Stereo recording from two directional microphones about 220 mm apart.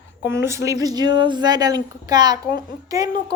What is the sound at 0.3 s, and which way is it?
A woman's voice, 10° right (ahead or behind).